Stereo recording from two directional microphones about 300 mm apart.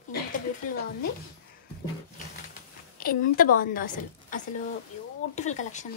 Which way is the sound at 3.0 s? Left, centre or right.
Left.